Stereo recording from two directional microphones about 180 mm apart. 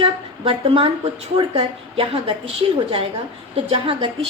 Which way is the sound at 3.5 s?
30° right (ahead or behind).